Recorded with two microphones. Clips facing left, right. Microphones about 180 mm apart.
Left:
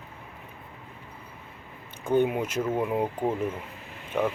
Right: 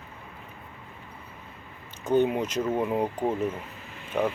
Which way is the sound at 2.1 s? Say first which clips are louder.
Right 1 dB; 10° left (ahead or behind).